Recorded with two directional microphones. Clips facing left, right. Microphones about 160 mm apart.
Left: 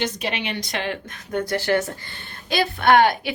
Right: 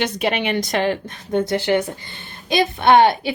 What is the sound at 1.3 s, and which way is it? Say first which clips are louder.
A woman's voice: right 3 dB; 25° right (ahead or behind).